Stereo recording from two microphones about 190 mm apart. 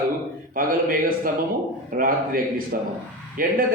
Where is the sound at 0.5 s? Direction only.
50° right (ahead or behind).